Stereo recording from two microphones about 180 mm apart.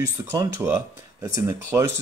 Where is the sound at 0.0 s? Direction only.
20° right (ahead or behind).